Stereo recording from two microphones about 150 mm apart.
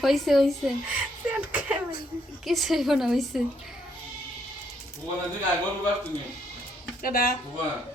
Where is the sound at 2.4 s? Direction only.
Centre (ahead or behind).